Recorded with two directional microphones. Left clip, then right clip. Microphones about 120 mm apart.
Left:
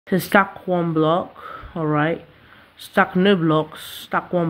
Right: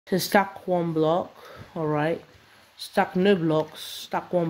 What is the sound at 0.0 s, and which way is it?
Speech, 15° right (ahead or behind).